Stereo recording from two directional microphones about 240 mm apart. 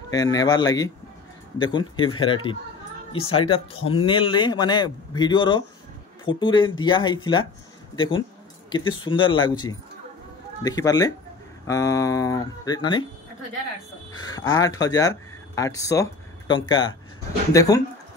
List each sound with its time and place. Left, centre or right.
0.1 s speech: centre
14.1 s speech: centre